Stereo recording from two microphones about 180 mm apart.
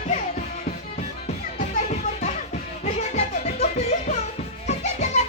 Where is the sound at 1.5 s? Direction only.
40° left (ahead or behind).